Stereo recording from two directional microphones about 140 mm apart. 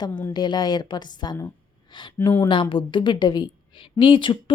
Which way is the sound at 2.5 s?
35° left (ahead or behind).